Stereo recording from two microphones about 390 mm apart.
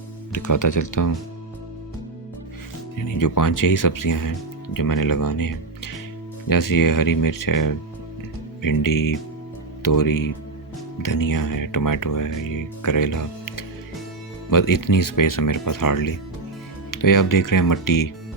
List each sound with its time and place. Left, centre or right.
0.3 s speech: left
3.0 s speech: left